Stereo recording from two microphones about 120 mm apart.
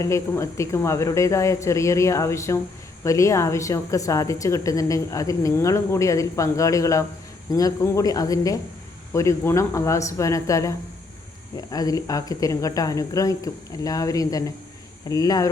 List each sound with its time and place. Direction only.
0.0 s a woman's voice: 25° left (ahead or behind)